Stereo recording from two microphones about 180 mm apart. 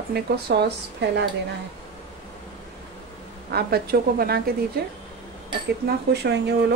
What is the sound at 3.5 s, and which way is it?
Speech, 60° right (ahead or behind).